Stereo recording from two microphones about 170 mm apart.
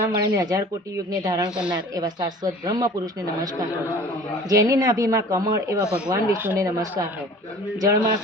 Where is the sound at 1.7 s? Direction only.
25° right (ahead or behind).